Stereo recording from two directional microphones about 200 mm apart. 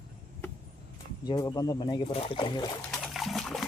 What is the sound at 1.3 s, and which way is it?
Speech, 20° left (ahead or behind).